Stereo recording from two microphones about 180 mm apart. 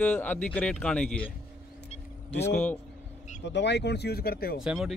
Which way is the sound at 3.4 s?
75° left (ahead or behind).